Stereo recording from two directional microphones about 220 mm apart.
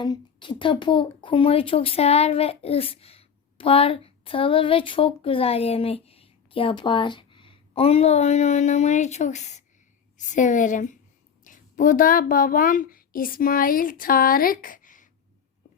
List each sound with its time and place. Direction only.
0.0 s a woman's voice: 20° left (ahead or behind); by 15.0 s 35° left (ahead or behind)